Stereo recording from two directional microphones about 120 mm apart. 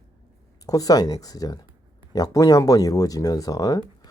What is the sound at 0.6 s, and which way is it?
Speech, 30° left (ahead or behind).